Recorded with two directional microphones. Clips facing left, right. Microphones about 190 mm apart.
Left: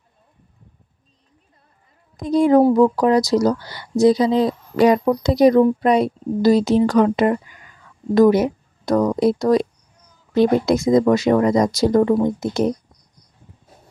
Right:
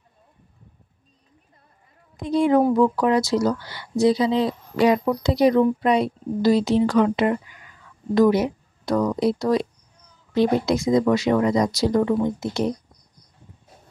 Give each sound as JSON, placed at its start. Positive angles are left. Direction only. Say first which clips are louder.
{"t": 2.1, "sound": "speech", "louder": "left 4 dB", "side_deg": 40}